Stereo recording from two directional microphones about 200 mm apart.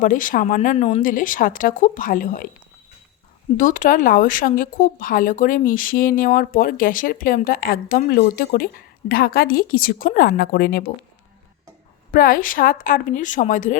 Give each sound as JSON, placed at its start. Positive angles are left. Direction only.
{"t": 0.0, "sound": "speech", "side_deg": 40}
{"t": 1.0, "sound": "speech", "side_deg": 40}
{"t": 3.6, "sound": "speech", "side_deg": 40}
{"t": 12.1, "sound": "speech", "side_deg": 45}